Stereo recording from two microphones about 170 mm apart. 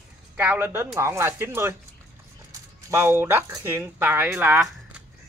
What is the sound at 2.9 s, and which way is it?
A man's voice, 15° right (ahead or behind).